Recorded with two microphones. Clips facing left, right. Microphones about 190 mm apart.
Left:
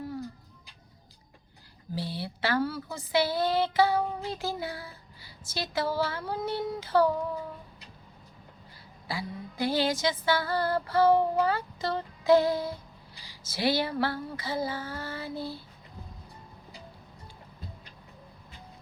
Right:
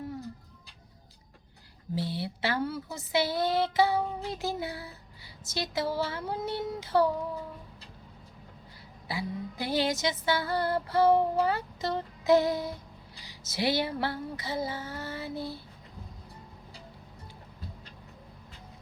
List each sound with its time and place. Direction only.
2.0 s female singing: 20° right (ahead or behind)
4.4 s a woman's voice: 25° right (ahead or behind)
5.7 s female singing: 25° right (ahead or behind)
9.0 s female singing: 20° right (ahead or behind)